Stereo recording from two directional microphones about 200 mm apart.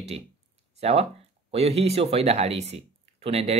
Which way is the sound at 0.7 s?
30° right (ahead or behind).